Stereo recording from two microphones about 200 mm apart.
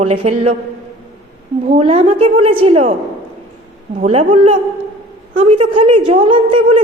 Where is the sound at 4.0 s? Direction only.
35° right (ahead or behind).